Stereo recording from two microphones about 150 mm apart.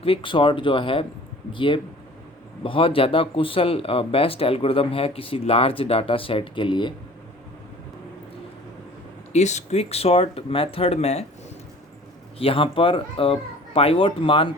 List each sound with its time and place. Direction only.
0.0 s speech: 35° left (ahead or behind)
9.3 s speech: 50° left (ahead or behind)
12.4 s speech: 40° left (ahead or behind)